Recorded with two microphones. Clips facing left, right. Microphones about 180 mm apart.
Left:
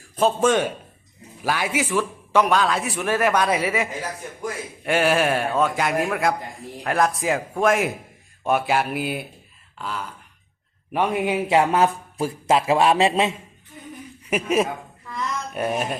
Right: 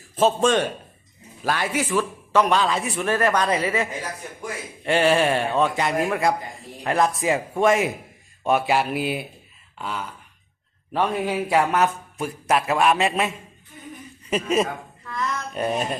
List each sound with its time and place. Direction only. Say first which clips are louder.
0.2 s a man's voice: even; centre (ahead or behind)
2.5 s a man's voice: left 1 dB; centre (ahead or behind)
10.9 s speech: left 1 dB; 15° left (ahead or behind)
14.3 s speech: left 1 dB; 10° left (ahead or behind)